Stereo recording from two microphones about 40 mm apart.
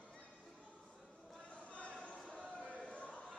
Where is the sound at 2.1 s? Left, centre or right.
Centre.